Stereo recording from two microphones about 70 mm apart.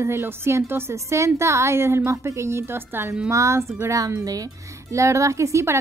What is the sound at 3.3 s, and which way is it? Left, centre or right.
Speech, right.